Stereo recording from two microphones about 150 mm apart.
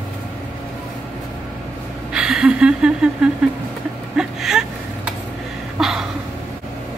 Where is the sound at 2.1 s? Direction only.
5° right (ahead or behind).